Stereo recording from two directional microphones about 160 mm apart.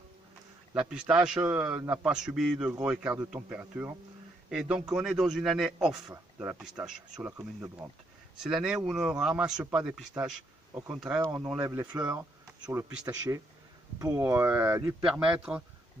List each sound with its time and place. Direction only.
0.7 s a man's voice: 5° right (ahead or behind)
7.2 s a man's voice: 15° right (ahead or behind)
8.4 s speech: 5° right (ahead or behind)
10.7 s a man's voice: 15° right (ahead or behind)
11.6 s speech: 20° right (ahead or behind)
11.9 s a man's voice: 10° right (ahead or behind)
12.5 s a man's voice: 25° right (ahead or behind); by 15.6 s 5° right (ahead or behind)